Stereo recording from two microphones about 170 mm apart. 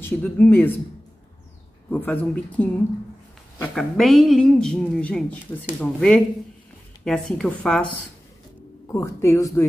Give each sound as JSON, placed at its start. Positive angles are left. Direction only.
{"t": 0.0, "sound": "speech", "side_deg": 10}
{"t": 1.9, "sound": "speech", "side_deg": 10}
{"t": 3.7, "sound": "speech", "side_deg": 0}
{"t": 8.8, "sound": "speech", "side_deg": 15}